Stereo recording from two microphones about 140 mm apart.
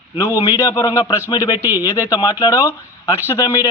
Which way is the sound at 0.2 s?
20° left (ahead or behind).